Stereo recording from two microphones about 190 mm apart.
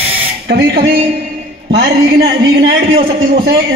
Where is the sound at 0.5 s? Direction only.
55° right (ahead or behind).